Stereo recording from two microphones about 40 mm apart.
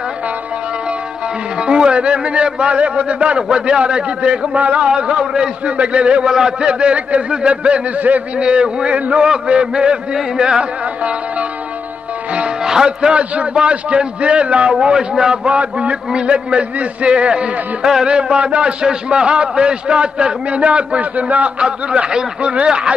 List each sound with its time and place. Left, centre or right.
1.6 s a man's voice: right
5.7 s a man's voice: right
6.3 s a sound: centre
6.7 s a man's voice: right
10.1 s a sound: centre
11.0 s music: right
12.6 s speech: centre
13.1 s a man's voice: right
15.5 s a man's voice: right